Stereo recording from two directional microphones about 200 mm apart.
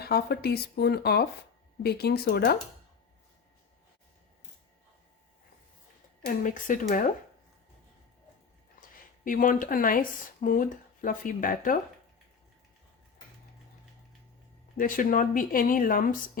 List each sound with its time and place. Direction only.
0.0 s speech: 50° left (ahead or behind)
6.2 s speech: 40° left (ahead or behind)
9.2 s speech: 40° left (ahead or behind)
14.8 s speech: 45° left (ahead or behind)